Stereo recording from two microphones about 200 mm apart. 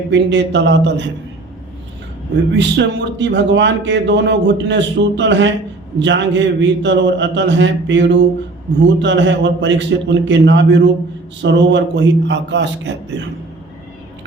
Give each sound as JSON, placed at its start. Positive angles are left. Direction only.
{"t": 0.1, "sound": "speech", "side_deg": -60}
{"t": 2.6, "sound": "speech", "side_deg": -60}